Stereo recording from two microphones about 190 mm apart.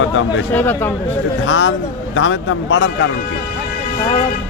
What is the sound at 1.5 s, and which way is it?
A man's voice, 75° left (ahead or behind).